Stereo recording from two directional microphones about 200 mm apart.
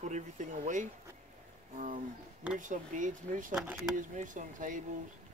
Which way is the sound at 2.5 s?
40° right (ahead or behind).